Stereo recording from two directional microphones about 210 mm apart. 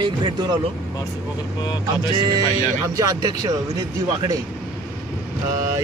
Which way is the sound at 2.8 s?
15° right (ahead or behind).